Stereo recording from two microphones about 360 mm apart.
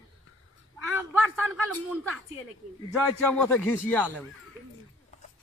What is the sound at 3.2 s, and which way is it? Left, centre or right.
Speech, centre.